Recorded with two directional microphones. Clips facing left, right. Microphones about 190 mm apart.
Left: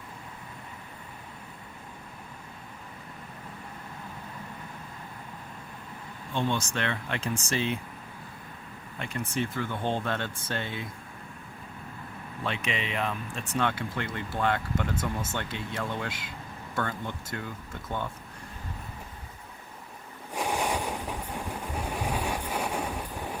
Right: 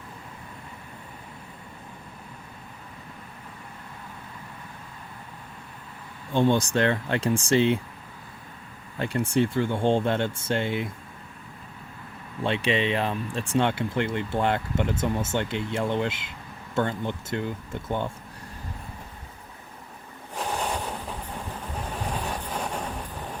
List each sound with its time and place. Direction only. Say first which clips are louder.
6.3 s speech: right 8 dB; 35° right (ahead or behind)
9.0 s speech: right 8 dB; 30° right (ahead or behind)
12.4 s speech: right 8 dB; 30° right (ahead or behind)
20.3 s vehicle: even; 10° left (ahead or behind)